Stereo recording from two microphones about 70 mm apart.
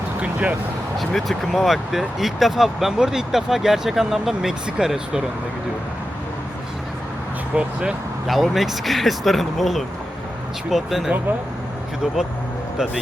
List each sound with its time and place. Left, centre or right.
0.2 s music: centre
0.9 s speech: centre
7.5 s speech: centre
8.3 s speech: centre